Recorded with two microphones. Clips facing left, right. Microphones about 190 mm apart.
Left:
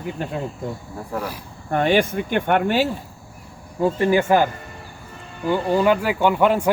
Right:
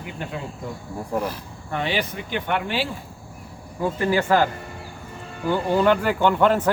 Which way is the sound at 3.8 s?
25° left (ahead or behind).